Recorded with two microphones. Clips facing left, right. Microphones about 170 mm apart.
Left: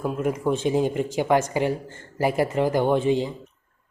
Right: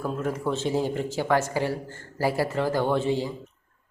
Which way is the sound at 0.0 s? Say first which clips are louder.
Left 3 dB; 15° left (ahead or behind).